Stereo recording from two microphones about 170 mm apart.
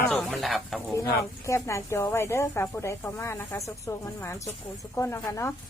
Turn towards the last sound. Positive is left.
turn(degrees=15)  # may be behind; listen again after turning